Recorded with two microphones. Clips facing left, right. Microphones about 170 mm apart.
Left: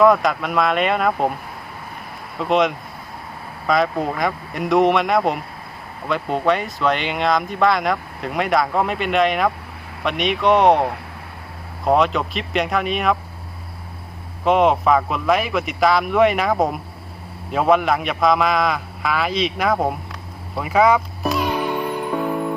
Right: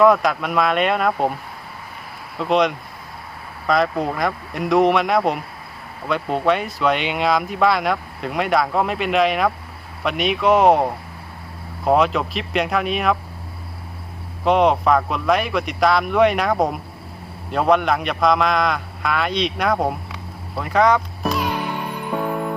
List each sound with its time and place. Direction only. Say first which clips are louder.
0.0 s speech: even; centre (ahead or behind)
2.4 s speech: even; centre (ahead or behind)
14.4 s speech: even; centre (ahead or behind)